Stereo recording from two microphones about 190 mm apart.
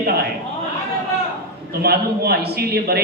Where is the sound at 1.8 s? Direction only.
55° right (ahead or behind).